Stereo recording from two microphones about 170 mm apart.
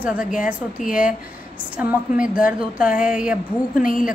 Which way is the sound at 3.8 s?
55° left (ahead or behind).